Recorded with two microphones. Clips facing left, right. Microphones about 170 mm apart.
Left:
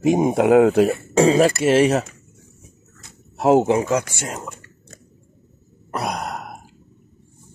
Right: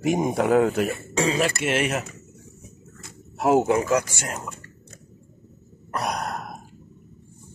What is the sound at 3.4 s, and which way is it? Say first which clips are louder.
Speech: left 4 dB; 20° left (ahead or behind).